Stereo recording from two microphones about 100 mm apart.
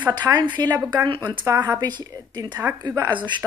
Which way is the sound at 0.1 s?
40° right (ahead or behind).